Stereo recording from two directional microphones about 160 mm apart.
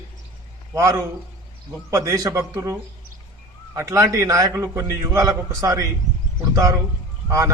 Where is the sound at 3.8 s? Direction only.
15° right (ahead or behind).